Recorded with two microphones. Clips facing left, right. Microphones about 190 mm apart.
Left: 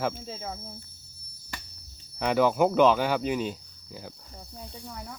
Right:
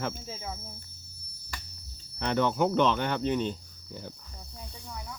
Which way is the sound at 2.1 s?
5° left (ahead or behind).